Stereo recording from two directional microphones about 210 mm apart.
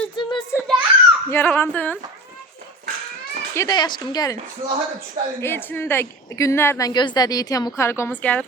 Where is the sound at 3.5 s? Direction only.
15° left (ahead or behind).